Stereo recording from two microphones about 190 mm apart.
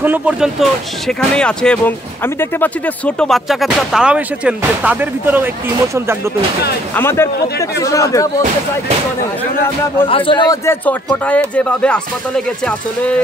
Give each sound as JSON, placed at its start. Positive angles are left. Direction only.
{"t": 0.0, "sound": "speech", "side_deg": -10}
{"t": 7.0, "sound": "a man's voice", "side_deg": 10}
{"t": 10.0, "sound": "a man's voice", "side_deg": 30}